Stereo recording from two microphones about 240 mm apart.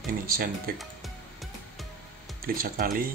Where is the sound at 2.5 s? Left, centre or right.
Right.